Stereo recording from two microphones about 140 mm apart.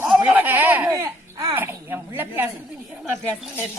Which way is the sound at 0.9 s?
25° right (ahead or behind).